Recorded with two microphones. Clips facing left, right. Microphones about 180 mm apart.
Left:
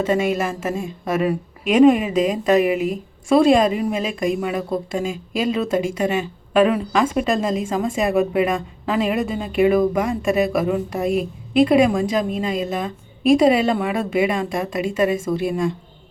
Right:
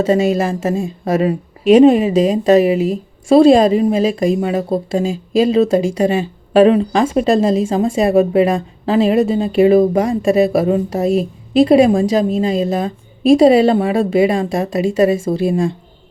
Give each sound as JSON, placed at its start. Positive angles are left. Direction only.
{"t": 0.1, "sound": "a woman's voice", "side_deg": -30}